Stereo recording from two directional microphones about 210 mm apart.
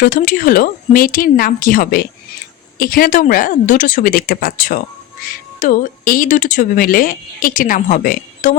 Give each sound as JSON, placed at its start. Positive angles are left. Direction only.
{"t": 0.0, "sound": "speech", "side_deg": 40}